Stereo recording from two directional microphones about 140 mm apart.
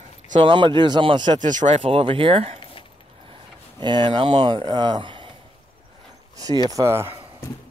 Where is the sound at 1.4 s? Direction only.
65° right (ahead or behind).